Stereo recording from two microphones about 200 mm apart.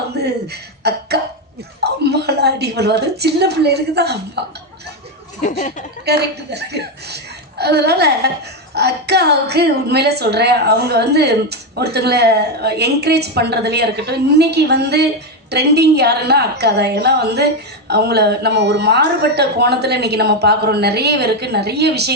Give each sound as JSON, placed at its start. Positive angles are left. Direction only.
{"t": 0.8, "sound": "a woman's voice", "side_deg": -55}
{"t": 5.4, "sound": "speech", "side_deg": 40}
{"t": 6.1, "sound": "a woman's voice", "side_deg": -55}